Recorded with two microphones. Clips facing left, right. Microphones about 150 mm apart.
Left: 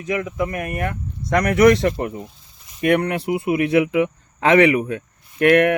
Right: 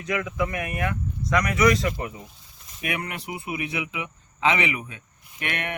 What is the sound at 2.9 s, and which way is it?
Speech, 60° left (ahead or behind).